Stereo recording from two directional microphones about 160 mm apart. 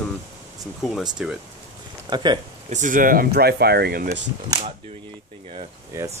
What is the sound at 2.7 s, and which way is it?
Speech, 55° right (ahead or behind).